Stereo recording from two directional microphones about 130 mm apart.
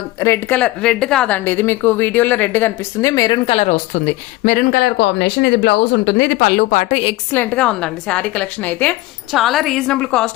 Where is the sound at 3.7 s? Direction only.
75° left (ahead or behind).